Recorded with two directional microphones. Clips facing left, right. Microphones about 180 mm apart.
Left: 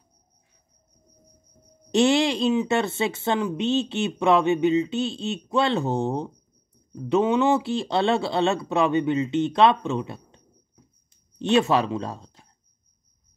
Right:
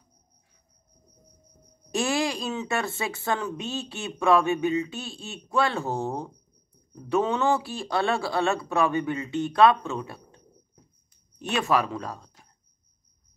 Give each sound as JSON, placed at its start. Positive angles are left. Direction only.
{"t": 1.9, "sound": "speech", "side_deg": 25}